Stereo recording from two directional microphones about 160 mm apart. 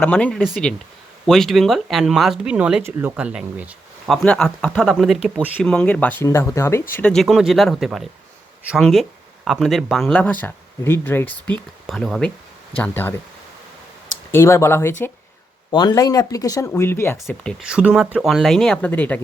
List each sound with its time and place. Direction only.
0.0 s speech: 10° left (ahead or behind); by 4.1 s 10° right (ahead or behind)
4.1 s speech: 5° left (ahead or behind)
6.9 s speech: 5° left (ahead or behind)
11.9 s speech: centre (ahead or behind)
14.3 s speech: 15° left (ahead or behind)
17.2 s speech: 5° right (ahead or behind)